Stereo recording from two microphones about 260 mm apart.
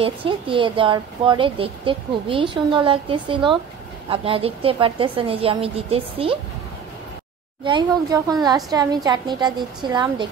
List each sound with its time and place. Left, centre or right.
0.0 s speech: centre
7.6 s a woman's voice: centre